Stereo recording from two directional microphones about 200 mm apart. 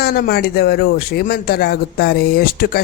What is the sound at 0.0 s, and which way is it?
Speech, 50° left (ahead or behind).